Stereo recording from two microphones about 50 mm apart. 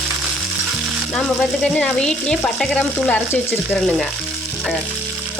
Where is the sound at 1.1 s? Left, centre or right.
Centre.